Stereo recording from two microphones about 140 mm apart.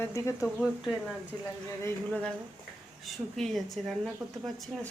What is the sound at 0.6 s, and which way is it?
Speech, 5° right (ahead or behind).